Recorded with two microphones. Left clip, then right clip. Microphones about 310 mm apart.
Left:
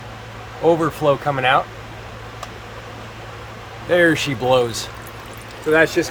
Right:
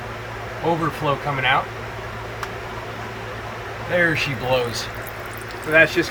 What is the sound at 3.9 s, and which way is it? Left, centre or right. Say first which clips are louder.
Speech: left 4 dB; left.